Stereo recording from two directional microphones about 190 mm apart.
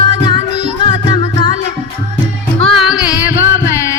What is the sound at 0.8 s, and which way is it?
Music, 25° left (ahead or behind).